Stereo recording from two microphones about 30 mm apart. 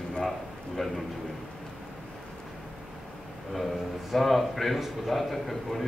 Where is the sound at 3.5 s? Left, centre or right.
Centre.